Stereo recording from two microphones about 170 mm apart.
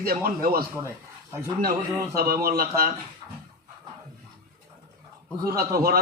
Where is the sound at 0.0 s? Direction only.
60° right (ahead or behind).